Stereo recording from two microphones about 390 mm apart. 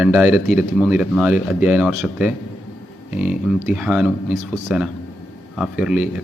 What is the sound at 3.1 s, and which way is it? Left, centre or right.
Speech, centre.